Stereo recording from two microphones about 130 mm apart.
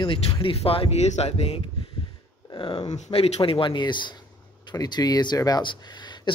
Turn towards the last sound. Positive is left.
turn(degrees=40)  # may be behind; listen again after turning